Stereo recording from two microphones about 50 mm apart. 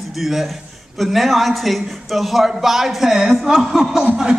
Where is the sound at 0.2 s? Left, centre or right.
Centre.